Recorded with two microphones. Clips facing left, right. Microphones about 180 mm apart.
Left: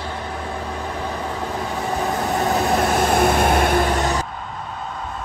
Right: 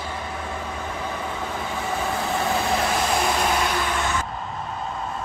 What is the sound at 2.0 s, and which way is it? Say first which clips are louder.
Vehicle: left 4 dB; 40° left (ahead or behind).